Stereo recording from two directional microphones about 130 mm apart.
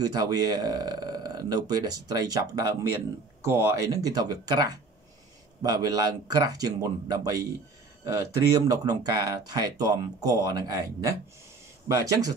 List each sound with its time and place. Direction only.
0.0 s a man's voice: 30° right (ahead or behind)
8.6 s a man's voice: 30° right (ahead or behind)